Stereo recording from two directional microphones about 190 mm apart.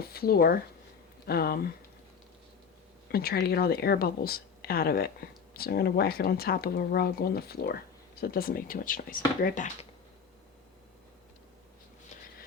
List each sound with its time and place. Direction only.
0.0 s a woman's voice: 55° left (ahead or behind)
3.1 s a woman's voice: 55° left (ahead or behind)